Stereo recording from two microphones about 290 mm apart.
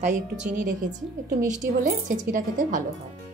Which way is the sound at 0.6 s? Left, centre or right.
Right.